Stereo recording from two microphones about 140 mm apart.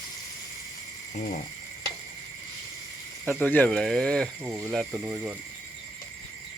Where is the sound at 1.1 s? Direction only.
65° left (ahead or behind).